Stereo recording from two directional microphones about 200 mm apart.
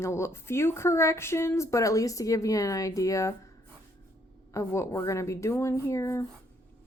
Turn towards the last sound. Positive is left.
turn(degrees=15)  # may be behind; listen again after turning